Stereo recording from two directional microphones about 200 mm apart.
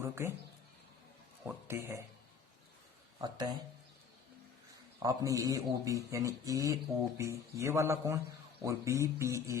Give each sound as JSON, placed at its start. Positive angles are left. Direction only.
{"t": 0.0, "sound": "a man's voice", "side_deg": -10}
{"t": 1.5, "sound": "a man's voice", "side_deg": -10}
{"t": 3.2, "sound": "speech", "side_deg": -20}
{"t": 5.0, "sound": "a man's voice", "side_deg": -15}